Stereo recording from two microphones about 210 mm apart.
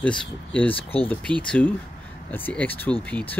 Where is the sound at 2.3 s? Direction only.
10° left (ahead or behind).